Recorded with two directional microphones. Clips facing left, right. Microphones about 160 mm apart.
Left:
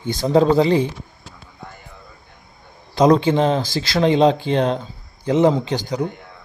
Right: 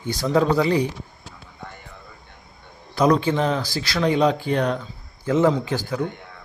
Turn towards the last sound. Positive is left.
turn(degrees=20)  # may be behind; listen again after turning